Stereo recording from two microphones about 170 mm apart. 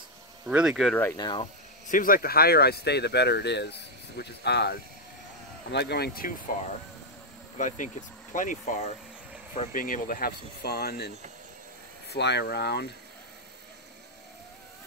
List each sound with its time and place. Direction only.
0.5 s speech: 5° right (ahead or behind)
1.1 s speech: 25° left (ahead or behind)
1.9 s speech: 55° left (ahead or behind)
7.5 s speech: 45° left (ahead or behind); by 11.1 s 65° left (ahead or behind)
12.1 s speech: 85° left